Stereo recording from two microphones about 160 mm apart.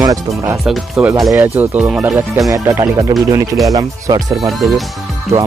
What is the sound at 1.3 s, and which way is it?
Speech, 10° right (ahead or behind).